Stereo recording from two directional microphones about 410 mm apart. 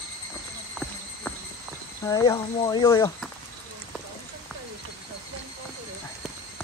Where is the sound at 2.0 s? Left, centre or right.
Centre.